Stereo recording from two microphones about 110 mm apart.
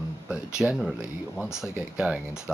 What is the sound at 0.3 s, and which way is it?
Speech, 5° right (ahead or behind).